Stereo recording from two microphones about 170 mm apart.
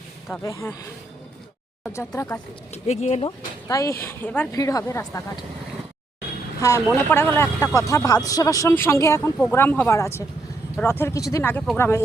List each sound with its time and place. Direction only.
0.3 s speech: 15° left (ahead or behind)
1.8 s speech: 15° left (ahead or behind)
2.7 s speech: 40° left (ahead or behind)
3.2 s speech: 20° left (ahead or behind)
6.6 s speech: 15° left (ahead or behind)